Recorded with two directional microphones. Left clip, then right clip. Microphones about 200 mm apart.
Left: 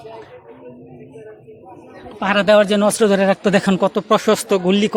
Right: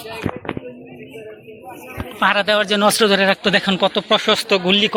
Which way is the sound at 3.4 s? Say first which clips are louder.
Even; 30° left (ahead or behind).